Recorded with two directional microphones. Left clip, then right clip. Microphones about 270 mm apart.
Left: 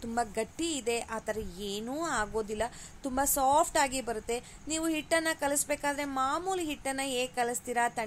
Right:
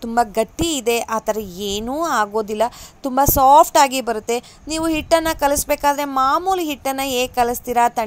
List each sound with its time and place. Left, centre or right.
0.0 s a woman's voice: right